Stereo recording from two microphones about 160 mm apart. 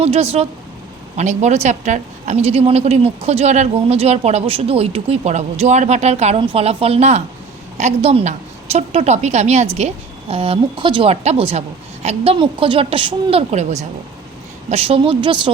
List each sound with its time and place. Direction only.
0.0 s a woman's voice: 40° right (ahead or behind)
13.5 s a woman's voice: 45° right (ahead or behind)